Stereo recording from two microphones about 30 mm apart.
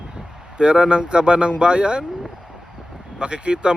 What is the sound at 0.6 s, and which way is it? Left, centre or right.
Speech, right.